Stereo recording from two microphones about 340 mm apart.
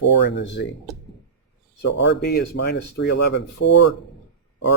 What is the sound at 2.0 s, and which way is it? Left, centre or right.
Speech, left.